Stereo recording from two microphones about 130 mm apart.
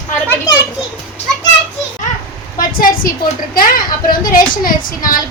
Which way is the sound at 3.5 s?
90° left.